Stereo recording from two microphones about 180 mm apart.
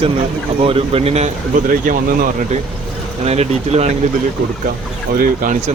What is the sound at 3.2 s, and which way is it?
Speech, 35° right (ahead or behind).